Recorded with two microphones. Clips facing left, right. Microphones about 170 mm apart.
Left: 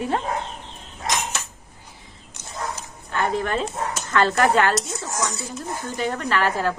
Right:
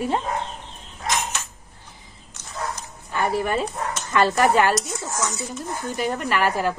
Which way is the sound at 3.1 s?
10° right (ahead or behind).